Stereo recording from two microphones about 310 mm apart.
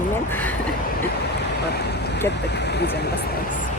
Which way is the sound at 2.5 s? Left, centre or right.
Left.